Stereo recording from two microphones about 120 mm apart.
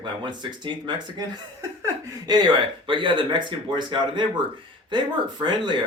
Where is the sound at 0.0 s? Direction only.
40° right (ahead or behind).